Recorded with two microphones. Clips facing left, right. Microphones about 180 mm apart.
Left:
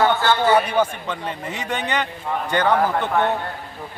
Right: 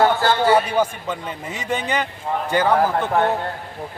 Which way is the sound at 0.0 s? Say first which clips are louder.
Right 1 dB; 35° right (ahead or behind).